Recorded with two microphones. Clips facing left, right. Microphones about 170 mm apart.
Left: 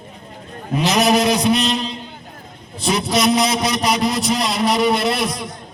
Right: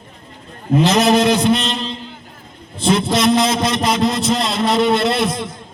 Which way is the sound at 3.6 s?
25° right (ahead or behind).